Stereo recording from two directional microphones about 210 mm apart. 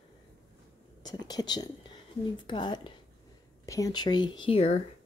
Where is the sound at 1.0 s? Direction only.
20° left (ahead or behind).